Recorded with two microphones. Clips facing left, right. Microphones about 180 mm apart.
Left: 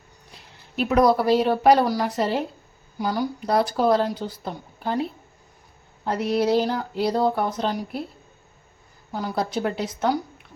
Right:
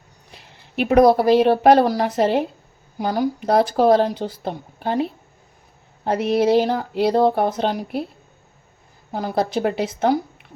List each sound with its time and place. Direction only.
0.8 s female singing: 55° right (ahead or behind)
3.0 s a woman's voice: 50° right (ahead or behind)
6.1 s female singing: 65° right (ahead or behind)
9.1 s female singing: 65° right (ahead or behind)